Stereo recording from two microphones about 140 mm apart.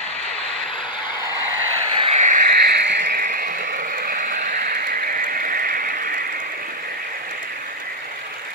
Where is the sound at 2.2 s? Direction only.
65° right (ahead or behind).